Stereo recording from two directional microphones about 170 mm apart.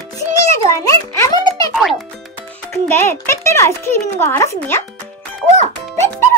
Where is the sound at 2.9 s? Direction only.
15° left (ahead or behind).